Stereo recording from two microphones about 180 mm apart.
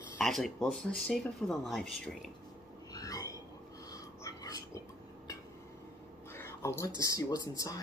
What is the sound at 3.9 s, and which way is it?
Whispering, 20° left (ahead or behind).